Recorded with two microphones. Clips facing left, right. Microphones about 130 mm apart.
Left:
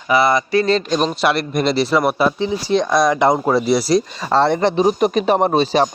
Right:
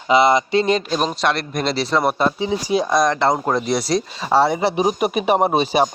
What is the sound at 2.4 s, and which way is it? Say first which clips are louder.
Speech: left 2 dB; 10° right (ahead or behind).